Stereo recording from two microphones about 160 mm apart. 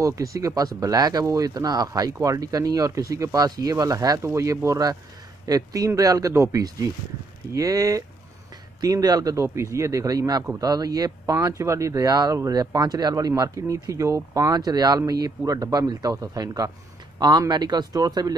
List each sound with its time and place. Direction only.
0.0 s speech: 20° right (ahead or behind)